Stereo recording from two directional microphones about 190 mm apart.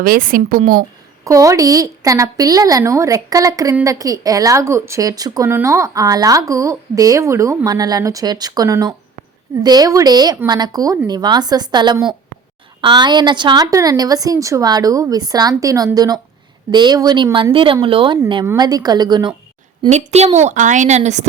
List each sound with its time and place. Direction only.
0.0 s a woman's voice: 50° right (ahead or behind)
1.2 s a woman's voice: 15° right (ahead or behind)
19.9 s a woman's voice: 35° right (ahead or behind)